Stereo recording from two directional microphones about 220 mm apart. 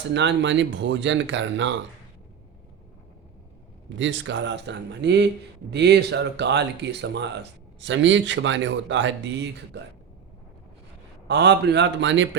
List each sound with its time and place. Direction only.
0.1 s speech: 55° right (ahead or behind)
3.8 s speech: 55° right (ahead or behind)
11.3 s speech: 50° right (ahead or behind)